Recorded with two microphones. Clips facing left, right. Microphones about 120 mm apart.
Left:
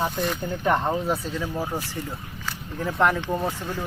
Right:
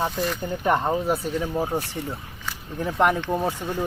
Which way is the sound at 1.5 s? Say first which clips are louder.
Right 4 dB; 25° right (ahead or behind).